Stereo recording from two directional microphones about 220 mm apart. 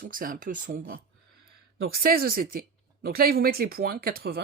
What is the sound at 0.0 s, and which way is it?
Speech, 40° right (ahead or behind).